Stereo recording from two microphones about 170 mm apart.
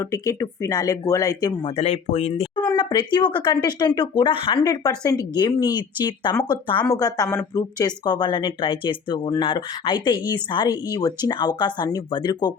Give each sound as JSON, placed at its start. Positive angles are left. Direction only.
{"t": 0.0, "sound": "speech", "side_deg": 20}
{"t": 1.7, "sound": "speech", "side_deg": 40}
{"t": 2.6, "sound": "speech", "side_deg": 25}